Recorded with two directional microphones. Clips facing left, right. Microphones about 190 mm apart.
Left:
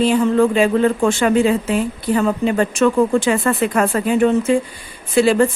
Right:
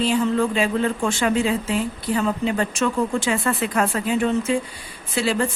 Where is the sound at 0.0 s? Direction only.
55° left (ahead or behind).